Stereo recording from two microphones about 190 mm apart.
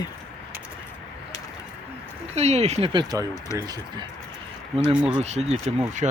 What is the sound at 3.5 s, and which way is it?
Speech, 15° left (ahead or behind).